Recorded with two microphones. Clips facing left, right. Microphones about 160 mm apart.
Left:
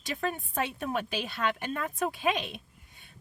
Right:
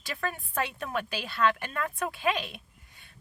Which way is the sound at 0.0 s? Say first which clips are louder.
Left 2 dB; 20° left (ahead or behind).